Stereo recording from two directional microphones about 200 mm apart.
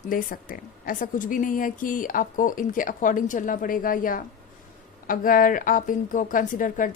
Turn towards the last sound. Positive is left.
turn(degrees=40)  # may be behind; listen again after turning